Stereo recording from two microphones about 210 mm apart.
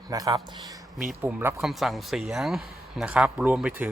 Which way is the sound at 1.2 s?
5° right (ahead or behind).